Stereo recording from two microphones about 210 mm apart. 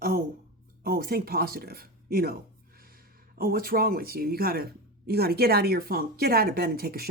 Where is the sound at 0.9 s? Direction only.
45° right (ahead or behind).